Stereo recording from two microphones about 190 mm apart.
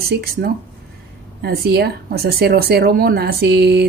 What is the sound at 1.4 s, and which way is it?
Speech, 55° right (ahead or behind).